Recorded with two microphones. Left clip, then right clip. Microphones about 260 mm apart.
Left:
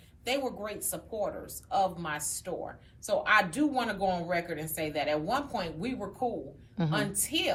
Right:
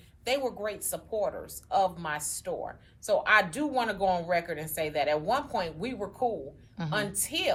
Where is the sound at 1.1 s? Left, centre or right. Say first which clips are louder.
Right 3 dB; centre.